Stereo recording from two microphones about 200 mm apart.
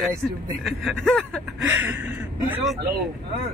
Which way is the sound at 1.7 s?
10° right (ahead or behind).